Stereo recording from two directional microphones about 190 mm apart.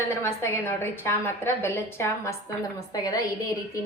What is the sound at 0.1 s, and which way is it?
Speech, 15° left (ahead or behind).